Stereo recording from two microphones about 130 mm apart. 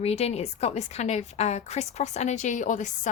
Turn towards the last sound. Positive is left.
turn(degrees=70)  # may be behind; listen again after turning